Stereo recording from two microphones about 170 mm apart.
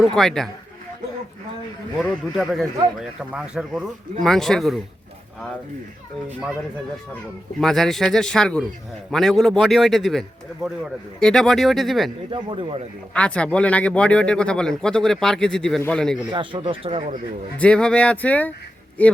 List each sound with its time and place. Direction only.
0.0 s speech: centre (ahead or behind)
2.0 s speech: centre (ahead or behind)
7.6 s speech: centre (ahead or behind)
12.3 s a man's voice: 30° right (ahead or behind)
13.1 s speech: 5° left (ahead or behind)
16.3 s speech: 30° right (ahead or behind)
17.6 s speech: 5° left (ahead or behind)